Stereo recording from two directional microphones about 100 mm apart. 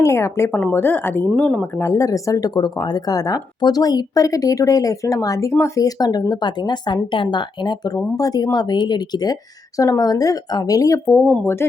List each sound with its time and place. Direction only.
0.0 s speech: 30° left (ahead or behind)
1.9 s speech: 35° left (ahead or behind)